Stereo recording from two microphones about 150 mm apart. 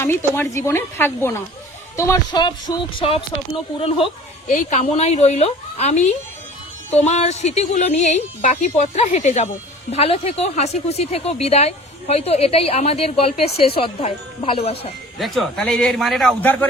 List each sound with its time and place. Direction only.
0.0 s a woman's voice: 15° left (ahead or behind); by 4.1 s 40° left (ahead or behind)
4.4 s a woman's voice: 55° left (ahead or behind)
15.2 s speech: centre (ahead or behind)
16.4 s a woman's voice: 10° left (ahead or behind)